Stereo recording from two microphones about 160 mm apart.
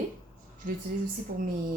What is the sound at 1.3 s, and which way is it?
Speech, 65° right (ahead or behind).